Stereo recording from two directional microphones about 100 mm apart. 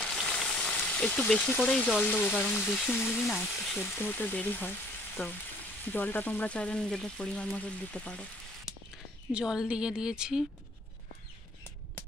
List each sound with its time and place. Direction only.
0.0 s frying: 5° left (ahead or behind)
0.7 s speech: 15° left (ahead or behind)
3.3 s speech: 10° left (ahead or behind)
3.8 s frying: 20° left (ahead or behind)
5.9 s speech: 15° left (ahead or behind)
8.6 s speech: 5° right (ahead or behind)